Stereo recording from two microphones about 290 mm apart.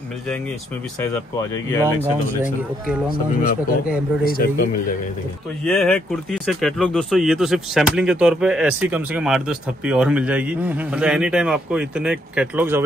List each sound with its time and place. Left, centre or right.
1.7 s speech: centre
2.4 s speech: centre
4.2 s a man's voice: left
5.7 s speech: centre